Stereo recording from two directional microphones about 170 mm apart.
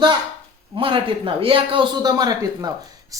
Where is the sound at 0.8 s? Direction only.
30° right (ahead or behind).